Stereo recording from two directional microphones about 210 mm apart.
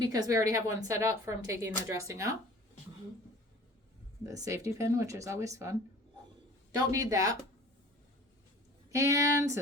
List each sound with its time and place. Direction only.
0.0 s a woman's voice: 15° right (ahead or behind)
4.3 s a woman's voice: 15° right (ahead or behind)
8.9 s a woman's voice: 15° right (ahead or behind)